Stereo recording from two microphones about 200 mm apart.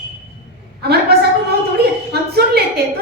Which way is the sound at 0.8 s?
55° right (ahead or behind).